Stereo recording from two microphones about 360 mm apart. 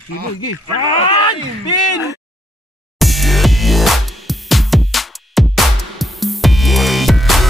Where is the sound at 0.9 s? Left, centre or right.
Centre.